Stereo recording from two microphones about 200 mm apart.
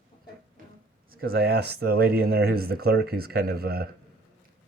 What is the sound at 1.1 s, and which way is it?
A man's voice, 50° right (ahead or behind).